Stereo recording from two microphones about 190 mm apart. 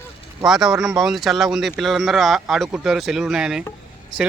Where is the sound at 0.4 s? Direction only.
Centre (ahead or behind).